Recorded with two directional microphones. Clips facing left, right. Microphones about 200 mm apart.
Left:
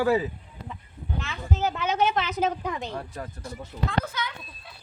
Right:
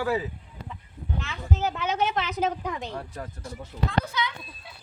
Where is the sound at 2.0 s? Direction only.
35° left (ahead or behind).